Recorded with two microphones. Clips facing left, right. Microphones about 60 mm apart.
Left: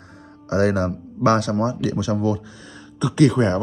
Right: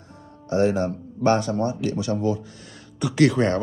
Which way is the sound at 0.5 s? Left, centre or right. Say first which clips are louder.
Left 1 dB; left.